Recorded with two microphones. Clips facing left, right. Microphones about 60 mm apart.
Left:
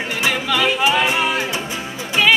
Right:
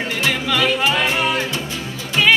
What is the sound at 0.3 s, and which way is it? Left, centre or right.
Music, centre.